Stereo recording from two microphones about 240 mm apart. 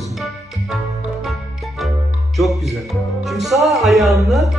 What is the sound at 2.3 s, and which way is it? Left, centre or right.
Music, centre.